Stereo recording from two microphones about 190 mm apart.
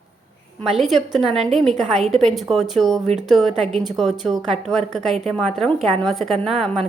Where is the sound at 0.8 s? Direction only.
Centre (ahead or behind).